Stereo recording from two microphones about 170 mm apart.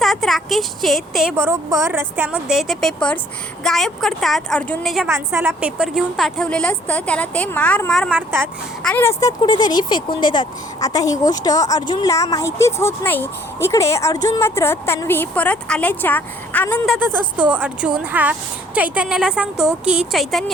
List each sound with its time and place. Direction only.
0.0 s speech: centre (ahead or behind)
5.0 s speech: 15° right (ahead or behind); by 8.1 s 5° left (ahead or behind)
8.1 s speech: 10° right (ahead or behind)
8.8 s speech: 5° left (ahead or behind)
9.4 s a woman's voice: 25° left (ahead or behind); by 16.9 s 10° left (ahead or behind)
16.9 s speech: 10° right (ahead or behind)